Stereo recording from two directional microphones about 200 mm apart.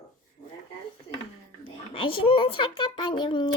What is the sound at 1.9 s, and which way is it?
Speech, 25° left (ahead or behind).